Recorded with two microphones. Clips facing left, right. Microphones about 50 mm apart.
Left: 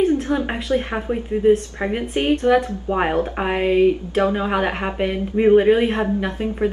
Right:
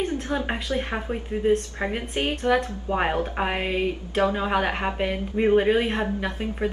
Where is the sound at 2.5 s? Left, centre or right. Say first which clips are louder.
Left 5 dB; centre.